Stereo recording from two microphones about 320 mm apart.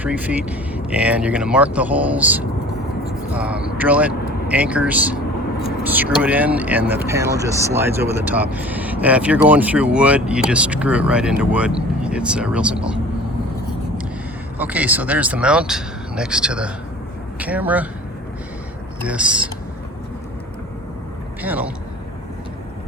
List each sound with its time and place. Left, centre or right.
0.0 s speech: centre
14.6 s speech: centre
19.0 s speech: centre
21.4 s speech: centre